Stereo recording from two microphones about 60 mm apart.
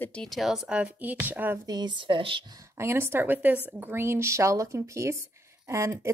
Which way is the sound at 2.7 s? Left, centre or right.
Right.